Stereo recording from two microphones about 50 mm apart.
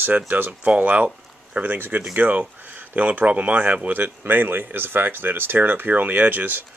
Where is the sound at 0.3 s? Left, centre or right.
Right.